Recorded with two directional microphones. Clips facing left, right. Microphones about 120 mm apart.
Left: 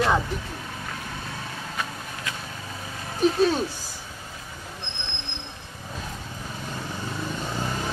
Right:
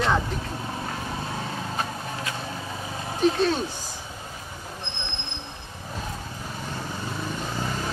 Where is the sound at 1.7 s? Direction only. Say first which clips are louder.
Right 3 dB; 30° right (ahead or behind).